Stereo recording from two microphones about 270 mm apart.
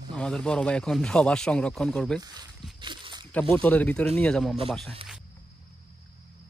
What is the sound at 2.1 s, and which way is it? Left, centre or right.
Speech, centre.